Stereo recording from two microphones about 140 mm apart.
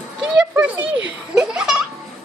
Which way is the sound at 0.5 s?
10° right (ahead or behind).